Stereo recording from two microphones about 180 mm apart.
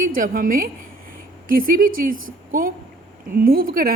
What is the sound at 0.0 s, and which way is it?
Speech, 50° right (ahead or behind).